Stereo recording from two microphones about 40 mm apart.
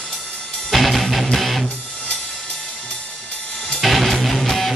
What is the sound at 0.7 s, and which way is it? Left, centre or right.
Music, centre.